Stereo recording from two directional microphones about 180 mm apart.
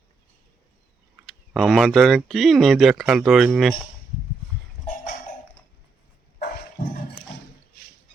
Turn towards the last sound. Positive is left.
turn(degrees=55)  # may be behind; listen again after turning